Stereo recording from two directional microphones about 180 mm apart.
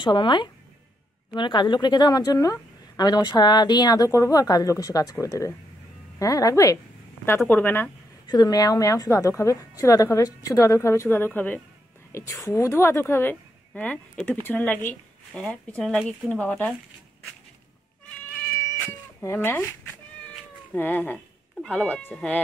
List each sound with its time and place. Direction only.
0.0 s a woman's voice: 25° left (ahead or behind)
8.3 s a woman's voice: 20° left (ahead or behind); by 16.7 s 5° left (ahead or behind)
19.2 s speech: 10° left (ahead or behind)
20.7 s speech: 10° left (ahead or behind)